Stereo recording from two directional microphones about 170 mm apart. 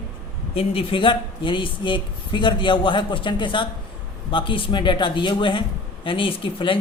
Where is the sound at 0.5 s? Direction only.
35° left (ahead or behind).